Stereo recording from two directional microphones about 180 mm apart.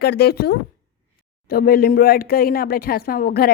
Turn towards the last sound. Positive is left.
turn(degrees=55)  # may be behind; listen again after turning